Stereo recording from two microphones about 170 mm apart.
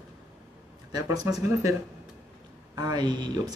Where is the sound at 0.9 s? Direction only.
20° right (ahead or behind).